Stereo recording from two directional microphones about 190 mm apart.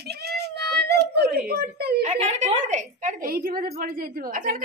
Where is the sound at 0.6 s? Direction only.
60° right (ahead or behind).